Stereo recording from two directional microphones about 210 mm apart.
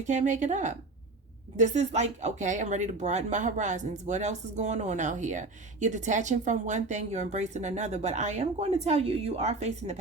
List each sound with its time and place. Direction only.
0.1 s speech: 35° right (ahead or behind)